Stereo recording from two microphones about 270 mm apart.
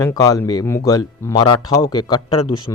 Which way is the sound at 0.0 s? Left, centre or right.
Centre.